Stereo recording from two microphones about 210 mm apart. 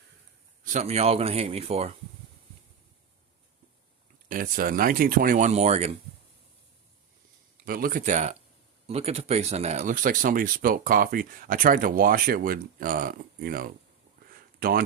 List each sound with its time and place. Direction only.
0.6 s speech: 35° right (ahead or behind)
4.3 s speech: 40° right (ahead or behind)
7.6 s speech: 45° right (ahead or behind)
14.2 s a sound: 45° right (ahead or behind)